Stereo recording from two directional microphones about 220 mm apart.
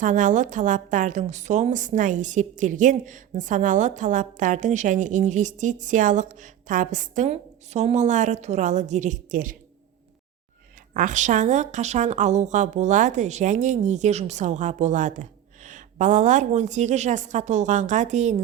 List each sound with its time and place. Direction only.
0.0 s a woman's voice: 35° right (ahead or behind)
10.9 s a woman's voice: 35° right (ahead or behind)